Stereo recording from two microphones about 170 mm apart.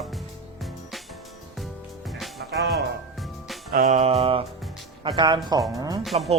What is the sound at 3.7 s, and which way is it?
Music, 60° right (ahead or behind).